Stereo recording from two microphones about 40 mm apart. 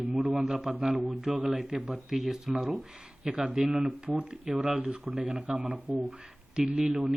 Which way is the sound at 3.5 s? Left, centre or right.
Centre.